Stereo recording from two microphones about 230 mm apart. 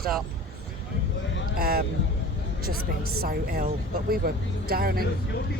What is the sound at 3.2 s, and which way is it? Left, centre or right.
Speech, right.